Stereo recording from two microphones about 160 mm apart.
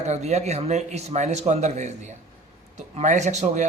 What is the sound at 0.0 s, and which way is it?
Speech, 45° right (ahead or behind).